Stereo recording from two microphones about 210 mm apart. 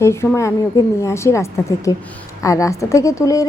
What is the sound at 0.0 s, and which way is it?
A woman's voice, 15° left (ahead or behind).